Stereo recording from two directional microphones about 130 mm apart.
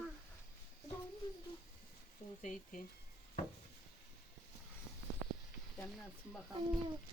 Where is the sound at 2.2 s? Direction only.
65° left (ahead or behind).